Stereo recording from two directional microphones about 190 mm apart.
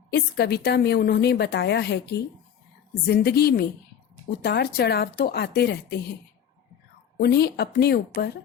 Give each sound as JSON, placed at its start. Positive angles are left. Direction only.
{"t": 0.1, "sound": "a woman's voice", "side_deg": 60}
{"t": 7.2, "sound": "a woman's voice", "side_deg": 60}